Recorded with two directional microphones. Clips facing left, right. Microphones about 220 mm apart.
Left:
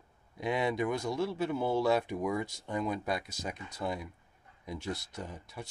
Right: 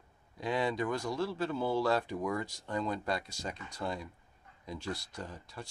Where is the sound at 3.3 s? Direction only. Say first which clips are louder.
Left 1 dB; 20° left (ahead or behind).